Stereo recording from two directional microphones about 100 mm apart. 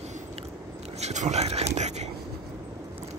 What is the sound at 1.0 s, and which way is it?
Speech, 90° right.